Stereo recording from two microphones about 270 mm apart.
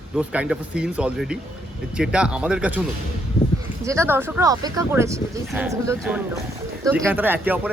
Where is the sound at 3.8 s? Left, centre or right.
Centre.